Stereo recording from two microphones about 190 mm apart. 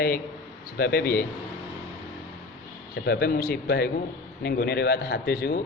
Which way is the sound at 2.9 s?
55° left (ahead or behind).